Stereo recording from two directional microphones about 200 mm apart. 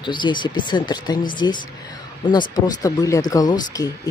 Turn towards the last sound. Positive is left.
turn(degrees=20)  # may be behind; listen again after turning